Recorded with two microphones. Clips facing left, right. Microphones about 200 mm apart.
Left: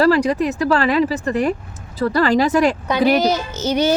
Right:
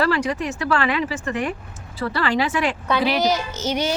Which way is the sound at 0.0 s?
35° left (ahead or behind).